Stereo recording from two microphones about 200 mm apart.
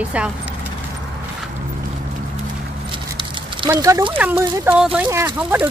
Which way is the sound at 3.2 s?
20° right (ahead or behind).